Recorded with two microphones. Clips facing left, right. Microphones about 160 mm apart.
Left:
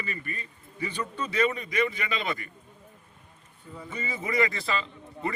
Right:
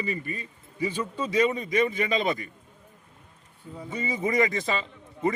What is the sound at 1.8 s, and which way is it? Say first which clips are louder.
Speech: right 2 dB; 45° right (ahead or behind).